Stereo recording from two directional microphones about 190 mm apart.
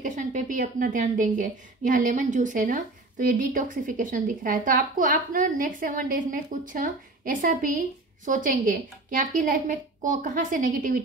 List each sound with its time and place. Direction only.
0.0 s a woman's voice: 45° right (ahead or behind)